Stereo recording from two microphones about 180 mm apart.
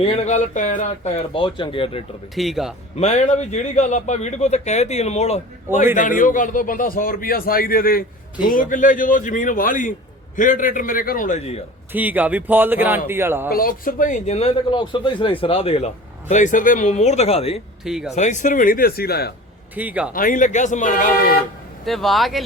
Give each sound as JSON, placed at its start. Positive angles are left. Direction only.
{"t": 0.0, "sound": "a man's voice", "side_deg": 40}
{"t": 2.3, "sound": "speech", "side_deg": 0}
{"t": 3.0, "sound": "a man's voice", "side_deg": 40}
{"t": 11.9, "sound": "speech", "side_deg": -10}
{"t": 13.5, "sound": "a man's voice", "side_deg": 55}
{"t": 17.8, "sound": "speech", "side_deg": -5}
{"t": 18.1, "sound": "a man's voice", "side_deg": 40}
{"t": 19.7, "sound": "speech", "side_deg": -10}
{"t": 20.1, "sound": "a man's voice", "side_deg": 50}
{"t": 21.8, "sound": "speech", "side_deg": 0}